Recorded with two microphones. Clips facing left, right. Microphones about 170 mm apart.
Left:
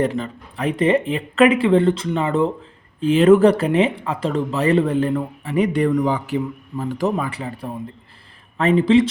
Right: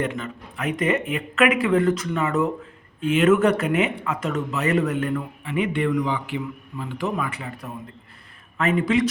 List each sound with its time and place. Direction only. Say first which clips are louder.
0.0 s speech: left 6 dB; 35° left (ahead or behind)